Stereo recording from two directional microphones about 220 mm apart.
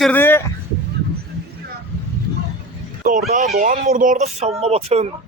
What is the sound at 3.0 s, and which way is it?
Speech, 35° right (ahead or behind).